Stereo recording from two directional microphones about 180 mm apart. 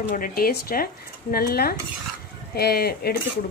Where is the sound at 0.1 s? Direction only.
55° left (ahead or behind).